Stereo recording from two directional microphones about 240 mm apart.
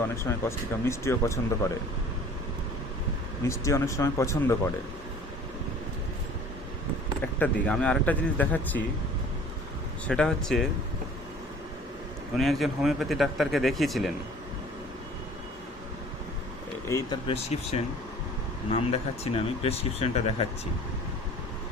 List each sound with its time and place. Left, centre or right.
0.2 s speech: centre
3.4 s speech: centre
7.3 s speech: centre
10.1 s speech: centre
12.4 s speech: centre
16.9 s speech: centre